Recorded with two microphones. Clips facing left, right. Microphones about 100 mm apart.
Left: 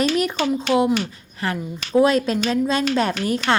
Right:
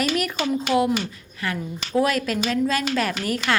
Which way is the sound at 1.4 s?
35° left (ahead or behind).